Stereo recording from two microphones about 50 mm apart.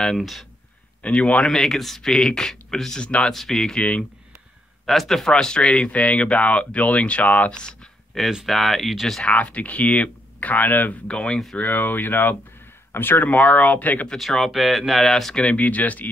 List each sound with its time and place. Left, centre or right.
0.2 s speech: centre
1.0 s speech: left
1.4 s speech: centre
4.8 s speech: centre; by 7.5 s left
8.2 s speech: centre
9.2 s speech: left
11.1 s speech: left
11.5 s speech: left
14.1 s speech: centre
15.4 s speech: left